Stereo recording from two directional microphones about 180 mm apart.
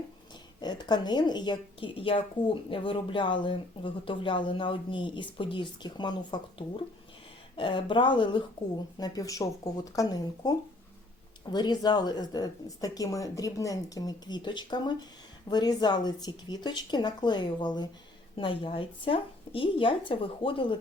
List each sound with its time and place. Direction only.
0.6 s a woman's voice: 25° left (ahead or behind)
11.5 s a woman's voice: 25° left (ahead or behind)